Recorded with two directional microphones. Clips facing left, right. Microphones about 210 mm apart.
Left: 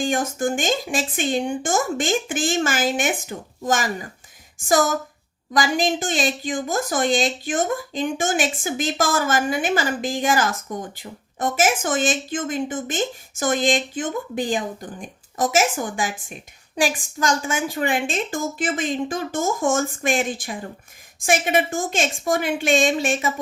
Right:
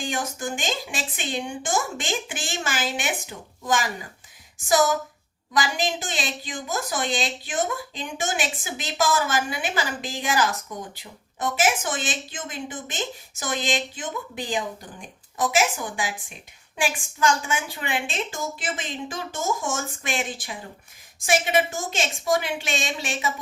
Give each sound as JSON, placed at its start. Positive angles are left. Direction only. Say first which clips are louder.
{"t": 0.0, "sound": "a woman's voice", "louder": "left 7 dB", "side_deg": 50}